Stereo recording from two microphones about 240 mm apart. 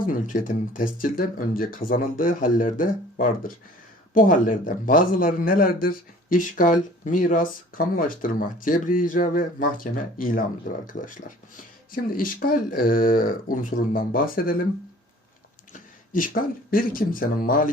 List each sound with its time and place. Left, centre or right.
0.0 s a man's voice: left
15.7 s speech: left